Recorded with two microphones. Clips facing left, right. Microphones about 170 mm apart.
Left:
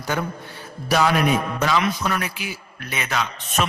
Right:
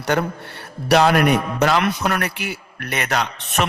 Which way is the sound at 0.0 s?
70° right (ahead or behind).